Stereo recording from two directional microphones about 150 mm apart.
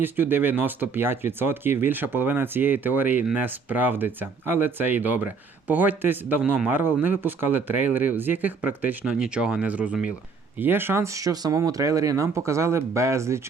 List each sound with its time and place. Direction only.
0.0 s speech: 15° right (ahead or behind)